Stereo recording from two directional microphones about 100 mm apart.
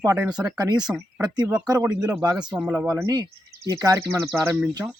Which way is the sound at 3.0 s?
40° right (ahead or behind).